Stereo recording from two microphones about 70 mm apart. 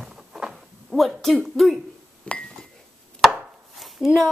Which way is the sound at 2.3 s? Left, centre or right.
Centre.